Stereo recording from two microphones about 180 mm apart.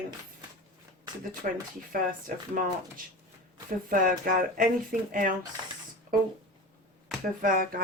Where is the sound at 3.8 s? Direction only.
50° right (ahead or behind).